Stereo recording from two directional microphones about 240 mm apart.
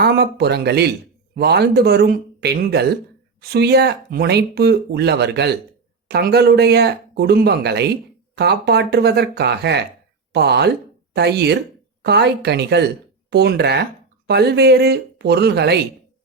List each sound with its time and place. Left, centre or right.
0.0 s speech: right